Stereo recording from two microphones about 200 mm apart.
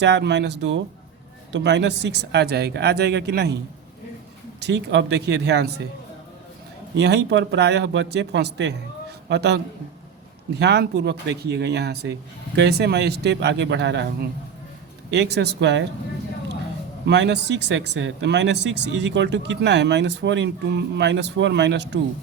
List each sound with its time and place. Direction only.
0.0 s speech: 60° right (ahead or behind)
4.6 s speech: 60° right (ahead or behind)
6.9 s speech: 55° right (ahead or behind)
10.6 s speech: 55° right (ahead or behind)
17.1 s speech: 60° right (ahead or behind)